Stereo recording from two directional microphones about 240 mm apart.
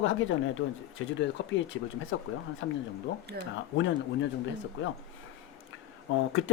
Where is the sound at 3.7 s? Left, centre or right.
Left.